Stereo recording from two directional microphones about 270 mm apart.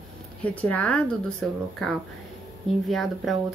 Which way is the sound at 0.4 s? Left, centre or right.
Centre.